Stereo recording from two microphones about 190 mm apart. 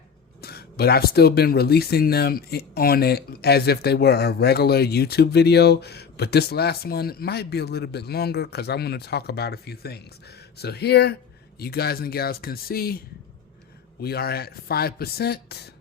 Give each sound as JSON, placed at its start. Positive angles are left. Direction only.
{"t": 0.4, "sound": "speech", "side_deg": 55}
{"t": 14.0, "sound": "speech", "side_deg": 55}